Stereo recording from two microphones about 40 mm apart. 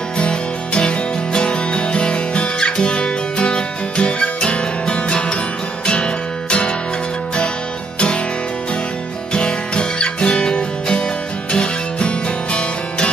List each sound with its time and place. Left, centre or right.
0.2 s music: left
9.3 s music: left